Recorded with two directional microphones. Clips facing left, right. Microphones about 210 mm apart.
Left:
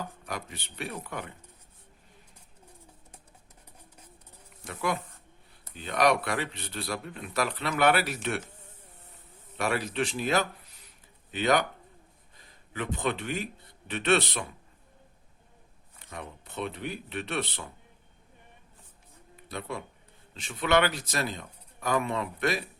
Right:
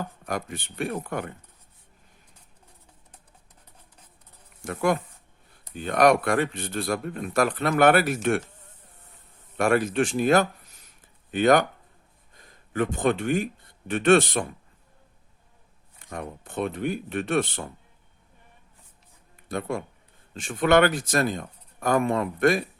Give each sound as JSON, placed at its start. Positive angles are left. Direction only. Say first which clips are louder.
{"t": 0.0, "sound": "speech", "louder": "right 6 dB", "side_deg": -50}
{"t": 4.6, "sound": "speech", "louder": "right 7 dB", "side_deg": -50}
{"t": 9.6, "sound": "speech", "louder": "right 7 dB", "side_deg": -50}
{"t": 12.7, "sound": "speech", "louder": "right 7 dB", "side_deg": -45}
{"t": 16.0, "sound": "speech", "louder": "right 6 dB", "side_deg": -50}
{"t": 19.5, "sound": "speech", "louder": "right 7 dB", "side_deg": -50}